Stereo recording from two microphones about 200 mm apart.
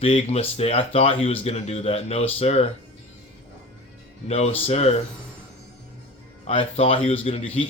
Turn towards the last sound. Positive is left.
turn(degrees=30)  # may be behind; listen again after turning